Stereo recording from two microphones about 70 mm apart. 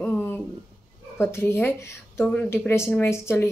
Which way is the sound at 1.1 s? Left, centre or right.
Left.